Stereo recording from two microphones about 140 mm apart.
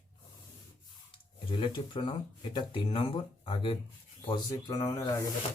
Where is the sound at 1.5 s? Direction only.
40° left (ahead or behind).